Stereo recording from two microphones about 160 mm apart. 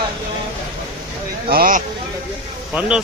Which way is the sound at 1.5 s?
60° right (ahead or behind).